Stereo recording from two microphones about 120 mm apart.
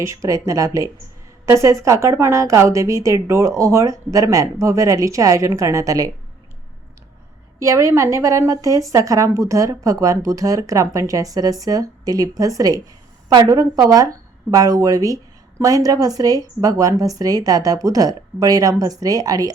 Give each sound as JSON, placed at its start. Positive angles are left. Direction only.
{"t": 0.0, "sound": "speech", "side_deg": -25}
{"t": 7.6, "sound": "speech", "side_deg": -25}